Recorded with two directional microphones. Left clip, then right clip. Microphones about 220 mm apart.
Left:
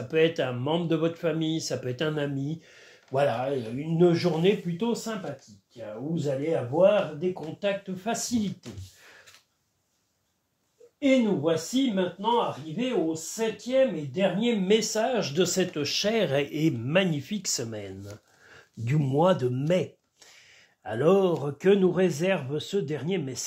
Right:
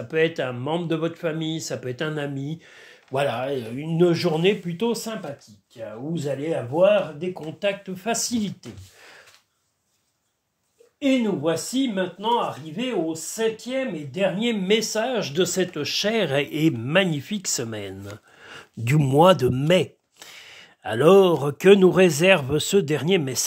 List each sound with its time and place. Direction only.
0.1 s speech: 20° right (ahead or behind); by 5.1 s 40° right (ahead or behind)
6.1 s speech: 45° right (ahead or behind)
11.0 s speech: 45° right (ahead or behind)
13.4 s speech: 45° right (ahead or behind)